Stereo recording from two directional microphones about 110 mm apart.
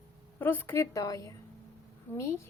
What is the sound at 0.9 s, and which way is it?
Speech, 35° left (ahead or behind).